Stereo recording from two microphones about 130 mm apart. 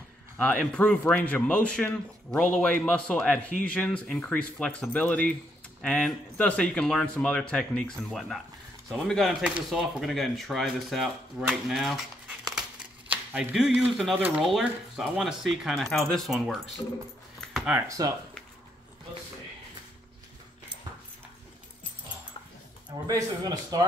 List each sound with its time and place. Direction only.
0.4 s speech: 10° left (ahead or behind)
13.1 s a sound: 10° right (ahead or behind)
14.1 s speech: 15° right (ahead or behind)
14.4 s speech: centre (ahead or behind)
17.8 s speech: 25° right (ahead or behind)
22.8 s speech: 30° right (ahead or behind)